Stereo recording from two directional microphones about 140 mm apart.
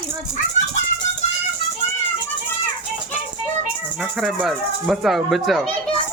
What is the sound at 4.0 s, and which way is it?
Speech, centre (ahead or behind).